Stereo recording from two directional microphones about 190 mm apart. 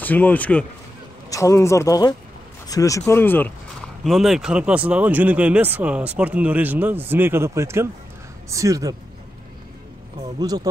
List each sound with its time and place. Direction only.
0.0 s speech: 10° left (ahead or behind)
4.0 s speech: centre (ahead or behind); by 8.9 s 20° right (ahead or behind)
10.4 s speech: 20° right (ahead or behind)